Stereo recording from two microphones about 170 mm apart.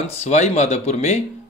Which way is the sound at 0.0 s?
40° left (ahead or behind).